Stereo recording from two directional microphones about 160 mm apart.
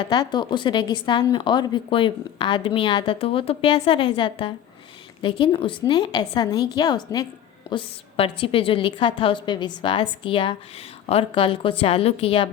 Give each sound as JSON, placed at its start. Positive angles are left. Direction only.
{"t": 0.0, "sound": "a woman's voice", "side_deg": 25}